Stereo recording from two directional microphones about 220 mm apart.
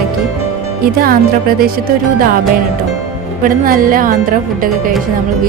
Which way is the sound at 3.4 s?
40° right (ahead or behind).